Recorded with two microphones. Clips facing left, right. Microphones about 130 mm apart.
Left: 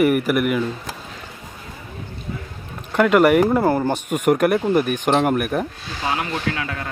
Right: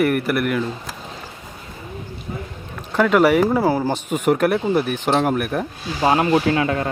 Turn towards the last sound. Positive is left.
turn(degrees=-25)  # may be behind; listen again after turning